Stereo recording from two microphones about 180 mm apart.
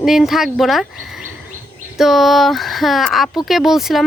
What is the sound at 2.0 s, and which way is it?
Speech, centre (ahead or behind).